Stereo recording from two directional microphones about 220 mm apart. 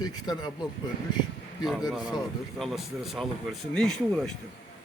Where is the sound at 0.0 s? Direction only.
20° left (ahead or behind).